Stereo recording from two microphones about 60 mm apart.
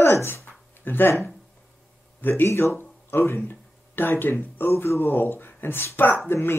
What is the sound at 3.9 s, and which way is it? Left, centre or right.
Speech, left.